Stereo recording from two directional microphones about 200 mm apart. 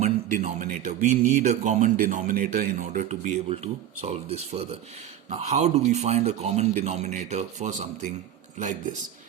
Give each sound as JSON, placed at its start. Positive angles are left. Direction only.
{"t": 0.0, "sound": "speech", "side_deg": -35}